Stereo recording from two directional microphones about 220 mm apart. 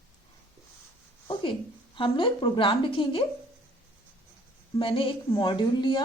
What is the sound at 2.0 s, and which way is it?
Speech, 25° left (ahead or behind).